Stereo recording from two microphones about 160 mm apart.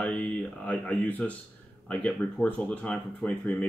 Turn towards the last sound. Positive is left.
turn(degrees=5)  # may be behind; listen again after turning